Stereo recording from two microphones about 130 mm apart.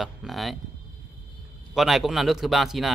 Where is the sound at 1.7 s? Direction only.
Centre (ahead or behind).